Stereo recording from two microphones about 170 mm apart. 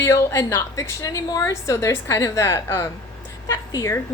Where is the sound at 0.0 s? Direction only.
15° left (ahead or behind).